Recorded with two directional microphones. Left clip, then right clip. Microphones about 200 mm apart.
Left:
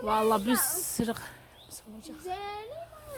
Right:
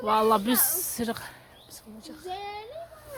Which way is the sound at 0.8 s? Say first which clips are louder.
Right 1 dB; 10° right (ahead or behind).